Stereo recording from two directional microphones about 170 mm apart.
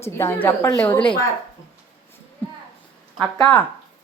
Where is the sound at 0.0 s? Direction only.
15° left (ahead or behind).